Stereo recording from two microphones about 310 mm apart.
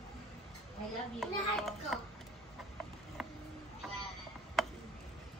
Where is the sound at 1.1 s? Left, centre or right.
Centre.